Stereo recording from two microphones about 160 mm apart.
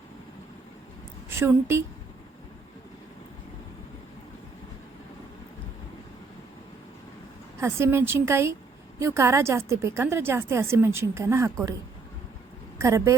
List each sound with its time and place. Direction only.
1.3 s a woman's voice: 15° right (ahead or behind)
7.6 s a woman's voice: 15° right (ahead or behind)
12.8 s speech: 20° right (ahead or behind)